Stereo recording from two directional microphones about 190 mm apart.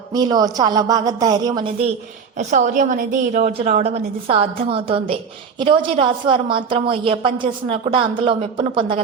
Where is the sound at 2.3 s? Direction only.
40° right (ahead or behind).